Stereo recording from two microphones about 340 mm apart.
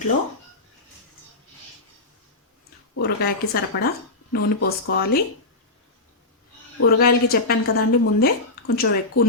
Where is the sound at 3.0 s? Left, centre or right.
Left.